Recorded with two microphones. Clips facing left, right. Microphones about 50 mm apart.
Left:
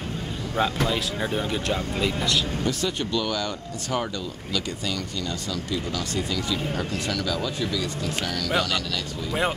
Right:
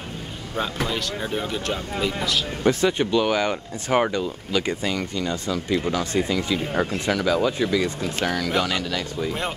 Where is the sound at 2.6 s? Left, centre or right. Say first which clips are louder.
Right 6 dB; right.